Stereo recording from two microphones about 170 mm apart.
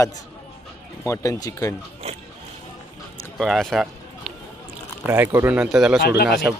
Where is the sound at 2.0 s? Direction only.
40° right (ahead or behind).